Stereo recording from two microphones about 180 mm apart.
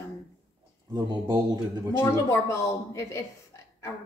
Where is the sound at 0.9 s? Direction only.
20° right (ahead or behind).